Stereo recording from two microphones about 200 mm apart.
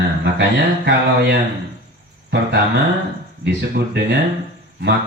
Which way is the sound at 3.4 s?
55° right (ahead or behind).